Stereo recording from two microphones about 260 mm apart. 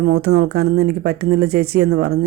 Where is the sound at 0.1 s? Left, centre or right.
Right.